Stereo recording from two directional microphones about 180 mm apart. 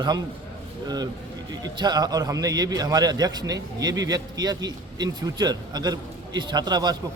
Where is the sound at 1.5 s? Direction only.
20° right (ahead or behind).